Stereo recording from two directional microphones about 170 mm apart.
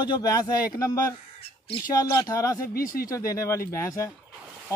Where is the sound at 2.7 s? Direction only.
55° left (ahead or behind).